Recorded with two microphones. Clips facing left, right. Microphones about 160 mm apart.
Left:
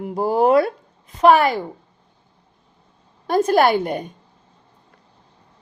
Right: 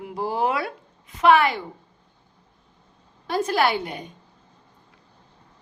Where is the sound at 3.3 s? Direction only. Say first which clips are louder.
Left 6 dB; 45° left (ahead or behind).